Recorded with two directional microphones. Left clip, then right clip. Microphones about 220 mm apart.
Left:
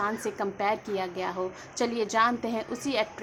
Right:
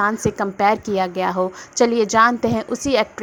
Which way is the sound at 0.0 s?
35° right (ahead or behind).